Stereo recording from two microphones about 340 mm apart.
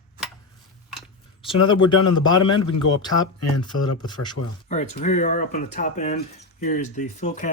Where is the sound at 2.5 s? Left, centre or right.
Left.